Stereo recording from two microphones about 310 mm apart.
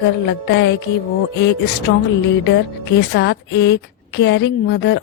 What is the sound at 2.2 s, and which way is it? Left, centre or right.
A woman's voice, left.